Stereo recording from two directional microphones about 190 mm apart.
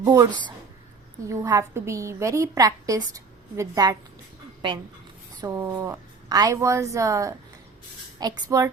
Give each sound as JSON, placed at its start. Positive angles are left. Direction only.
{"t": 0.0, "sound": "a woman's voice", "side_deg": -20}
{"t": 1.3, "sound": "a woman's voice", "side_deg": -15}
{"t": 5.4, "sound": "a woman's voice", "side_deg": -15}